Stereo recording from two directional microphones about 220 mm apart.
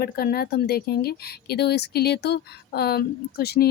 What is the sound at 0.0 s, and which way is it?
Speech, 45° left (ahead or behind).